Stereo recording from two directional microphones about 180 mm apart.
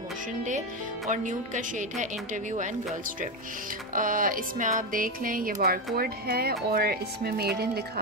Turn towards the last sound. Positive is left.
turn(degrees=-60)  # may be behind; listen again after turning